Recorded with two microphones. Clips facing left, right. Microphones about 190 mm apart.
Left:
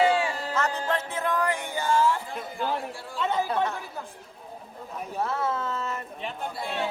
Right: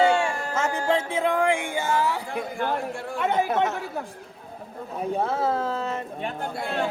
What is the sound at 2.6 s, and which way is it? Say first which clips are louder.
Speech: right 1 dB; 55° right (ahead or behind).